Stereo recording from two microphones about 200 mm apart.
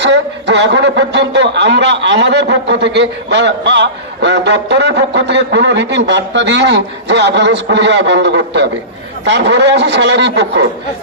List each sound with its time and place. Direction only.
0.0 s a man's voice: 60° right (ahead or behind)